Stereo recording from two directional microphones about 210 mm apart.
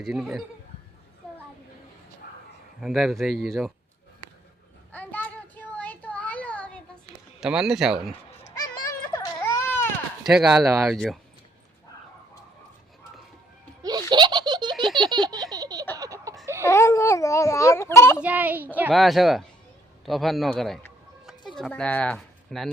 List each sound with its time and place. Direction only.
0.0 s speech: centre (ahead or behind)
1.2 s a sound: centre (ahead or behind)
2.8 s speech: centre (ahead or behind)
4.9 s a sound: 5° left (ahead or behind)
7.3 s speech: centre (ahead or behind)
8.9 s baby cry: 15° left (ahead or behind)
10.2 s speech: centre (ahead or behind)
14.1 s giggle: 20° right (ahead or behind)
14.9 s baby laughter: 20° right (ahead or behind)
16.0 s a sound: 15° right (ahead or behind)
16.6 s a sound: 15° left (ahead or behind)
18.2 s a woman's voice: 10° right (ahead or behind)